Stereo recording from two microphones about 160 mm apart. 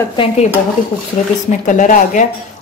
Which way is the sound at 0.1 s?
35° left (ahead or behind).